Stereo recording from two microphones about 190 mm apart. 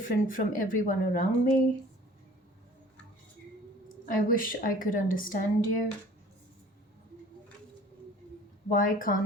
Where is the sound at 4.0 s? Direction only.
45° left (ahead or behind).